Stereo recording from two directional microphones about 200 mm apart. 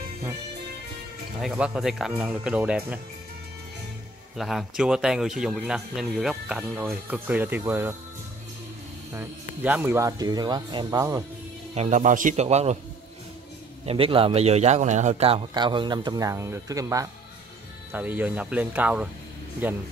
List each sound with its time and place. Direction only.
1.4 s speech: 5° right (ahead or behind)
4.4 s speech: centre (ahead or behind)
9.1 s speech: 10° right (ahead or behind)
11.7 s speech: 35° right (ahead or behind)
13.8 s a man's voice: 30° right (ahead or behind); by 19.0 s 10° right (ahead or behind)